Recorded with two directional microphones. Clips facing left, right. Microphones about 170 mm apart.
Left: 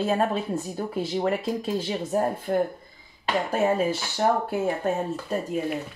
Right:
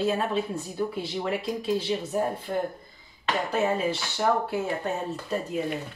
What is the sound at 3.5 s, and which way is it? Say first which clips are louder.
Speech: left 3 dB; 50° left (ahead or behind).